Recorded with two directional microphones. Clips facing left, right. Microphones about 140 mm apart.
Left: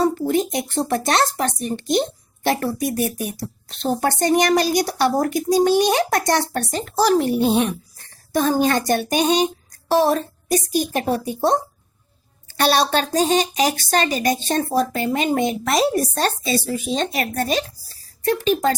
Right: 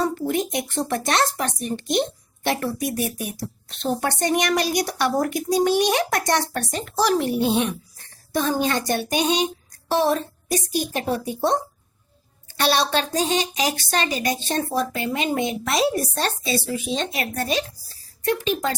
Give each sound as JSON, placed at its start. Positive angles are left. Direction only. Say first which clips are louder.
{"t": 0.0, "sound": "a woman's voice", "louder": "left 4 dB", "side_deg": 30}
{"t": 12.5, "sound": "a woman's voice", "louder": "left 3 dB", "side_deg": 40}